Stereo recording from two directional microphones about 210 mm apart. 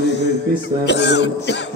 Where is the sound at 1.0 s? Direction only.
55° left (ahead or behind).